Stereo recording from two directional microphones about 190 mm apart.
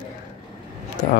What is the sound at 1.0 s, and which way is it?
Speech, 45° left (ahead or behind).